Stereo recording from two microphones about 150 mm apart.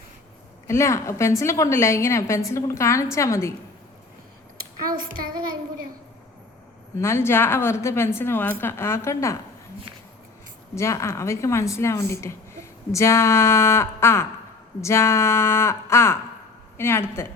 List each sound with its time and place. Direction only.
0.7 s a woman's voice: 20° left (ahead or behind)
7.0 s a woman's voice: 15° left (ahead or behind)
10.8 s a woman's voice: 20° left (ahead or behind)